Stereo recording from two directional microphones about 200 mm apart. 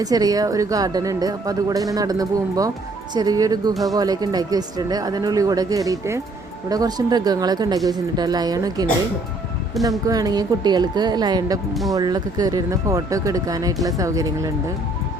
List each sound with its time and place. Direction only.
0.0 s speech: 20° right (ahead or behind)
9.8 s speech: centre (ahead or behind)
10.1 s speech: 20° right (ahead or behind)
11.7 s speech: centre (ahead or behind)
11.9 s speech: 20° right (ahead or behind)